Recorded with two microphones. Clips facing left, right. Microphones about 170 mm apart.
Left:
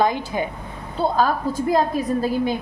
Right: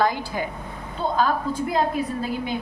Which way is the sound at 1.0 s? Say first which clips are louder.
Left 4 dB; 35° left (ahead or behind).